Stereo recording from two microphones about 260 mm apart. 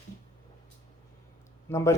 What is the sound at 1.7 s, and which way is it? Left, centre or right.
Speech, centre.